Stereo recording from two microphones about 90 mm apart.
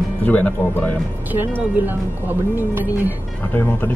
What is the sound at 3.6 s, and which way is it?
Speech, 20° left (ahead or behind).